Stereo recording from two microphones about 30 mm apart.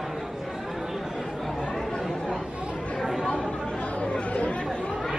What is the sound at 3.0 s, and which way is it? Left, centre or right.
Chatter, centre.